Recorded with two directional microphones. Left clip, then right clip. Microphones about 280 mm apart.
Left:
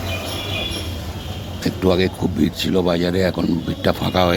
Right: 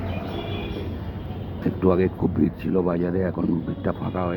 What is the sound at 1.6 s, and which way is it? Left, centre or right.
Music, left.